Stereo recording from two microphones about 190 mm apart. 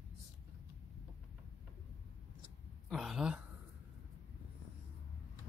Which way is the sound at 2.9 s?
Centre (ahead or behind).